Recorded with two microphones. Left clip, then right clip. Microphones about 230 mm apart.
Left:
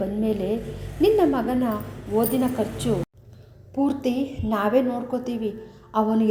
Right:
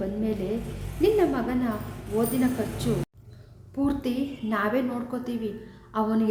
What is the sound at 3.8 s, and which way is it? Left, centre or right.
A woman's voice, centre.